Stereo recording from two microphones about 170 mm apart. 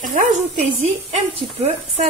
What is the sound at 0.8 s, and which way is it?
Speech, 40° right (ahead or behind).